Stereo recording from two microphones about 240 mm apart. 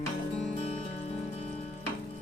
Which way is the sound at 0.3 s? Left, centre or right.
Left.